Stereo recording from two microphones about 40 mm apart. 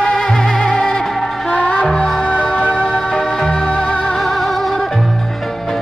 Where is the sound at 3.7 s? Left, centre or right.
Left.